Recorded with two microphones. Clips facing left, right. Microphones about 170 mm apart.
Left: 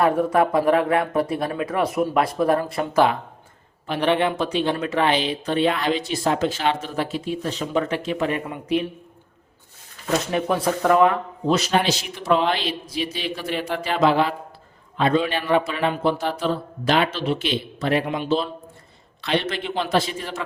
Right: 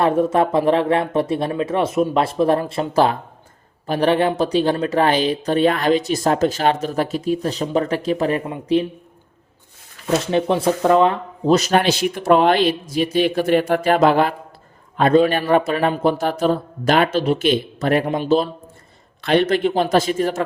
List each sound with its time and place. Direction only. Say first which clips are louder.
0.0 s speech: right 2 dB; 25° right (ahead or behind)
10.3 s speech: right 6 dB; 25° right (ahead or behind); by 20.4 s 45° right (ahead or behind)